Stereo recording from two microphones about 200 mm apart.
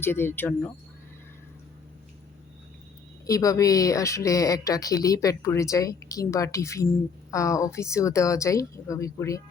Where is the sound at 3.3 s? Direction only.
15° left (ahead or behind).